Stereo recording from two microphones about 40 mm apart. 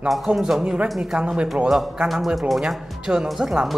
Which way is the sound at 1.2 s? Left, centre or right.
Right.